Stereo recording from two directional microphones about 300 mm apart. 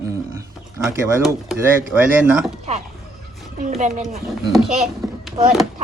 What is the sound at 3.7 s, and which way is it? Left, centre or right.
Speech, right.